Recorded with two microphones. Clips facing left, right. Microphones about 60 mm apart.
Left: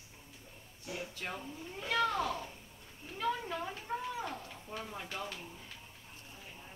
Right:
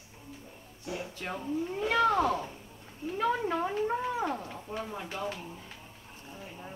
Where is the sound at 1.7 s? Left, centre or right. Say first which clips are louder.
Right 6 dB; right; by 5.3 s centre.